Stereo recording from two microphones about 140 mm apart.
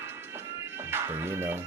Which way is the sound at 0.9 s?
15° right (ahead or behind).